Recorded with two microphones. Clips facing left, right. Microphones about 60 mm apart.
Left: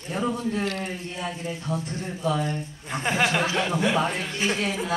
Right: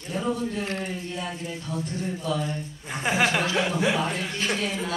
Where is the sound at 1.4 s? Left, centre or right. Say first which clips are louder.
Left 2 dB; left.